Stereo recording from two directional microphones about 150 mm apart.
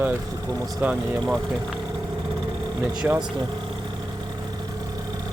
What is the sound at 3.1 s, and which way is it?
Speech, 10° right (ahead or behind).